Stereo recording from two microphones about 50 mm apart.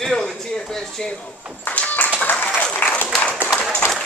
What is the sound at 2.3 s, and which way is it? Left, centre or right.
Applause, left.